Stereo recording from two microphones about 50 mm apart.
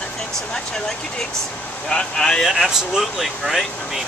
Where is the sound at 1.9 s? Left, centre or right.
Centre.